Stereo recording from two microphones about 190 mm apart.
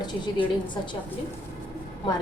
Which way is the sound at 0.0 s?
25° left (ahead or behind).